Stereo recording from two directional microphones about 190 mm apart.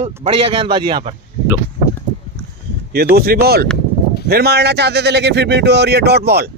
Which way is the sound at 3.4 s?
55° right (ahead or behind).